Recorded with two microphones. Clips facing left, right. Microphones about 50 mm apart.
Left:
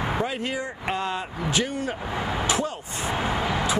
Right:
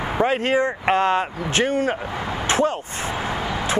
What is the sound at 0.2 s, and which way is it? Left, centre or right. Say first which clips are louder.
Speech: right 9 dB; right.